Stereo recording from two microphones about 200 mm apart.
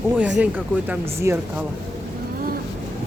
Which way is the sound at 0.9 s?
15° right (ahead or behind).